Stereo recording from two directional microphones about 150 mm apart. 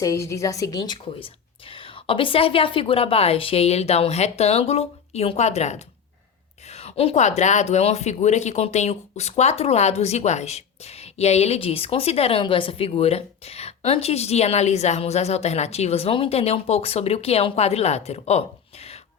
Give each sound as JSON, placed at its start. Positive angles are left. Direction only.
{"t": 0.0, "sound": "speech", "side_deg": 20}